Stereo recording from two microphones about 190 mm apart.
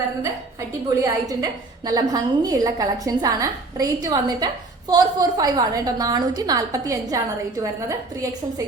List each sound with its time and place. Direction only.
1.0 s a woman's voice: 20° right (ahead or behind)